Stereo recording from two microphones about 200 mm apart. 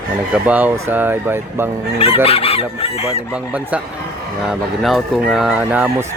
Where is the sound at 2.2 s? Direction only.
30° left (ahead or behind).